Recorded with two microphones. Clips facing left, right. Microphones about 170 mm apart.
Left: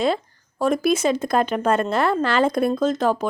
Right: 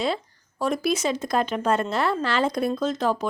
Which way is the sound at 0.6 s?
50° left (ahead or behind).